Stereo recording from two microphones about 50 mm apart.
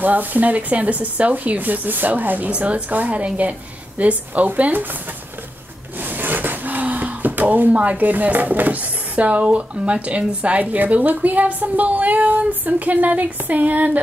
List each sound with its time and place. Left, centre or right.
0.0 s speech: right
5.9 s speech: right